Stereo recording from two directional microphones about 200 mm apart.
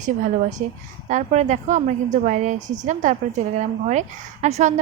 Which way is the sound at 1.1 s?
35° right (ahead or behind).